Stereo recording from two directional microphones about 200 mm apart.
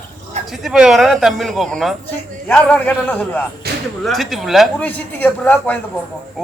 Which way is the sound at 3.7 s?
50° right (ahead or behind).